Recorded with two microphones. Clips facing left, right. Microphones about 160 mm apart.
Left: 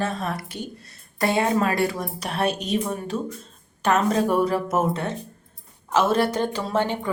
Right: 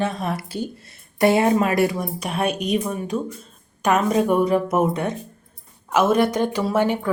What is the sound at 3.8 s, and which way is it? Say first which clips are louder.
Speech: right 2 dB; 10° right (ahead or behind).